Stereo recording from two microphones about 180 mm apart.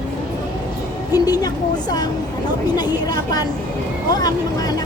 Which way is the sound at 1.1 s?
20° left (ahead or behind).